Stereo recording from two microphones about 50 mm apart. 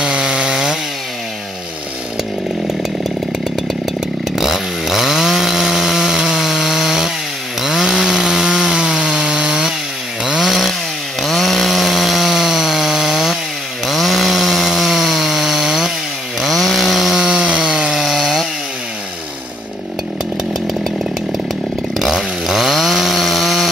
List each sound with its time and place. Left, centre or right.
0.0 s chainsaw: centre
4.4 s chainsaw: centre
11.1 s chainsaw: centre
17.9 s chainsaw: centre
21.9 s chainsaw: centre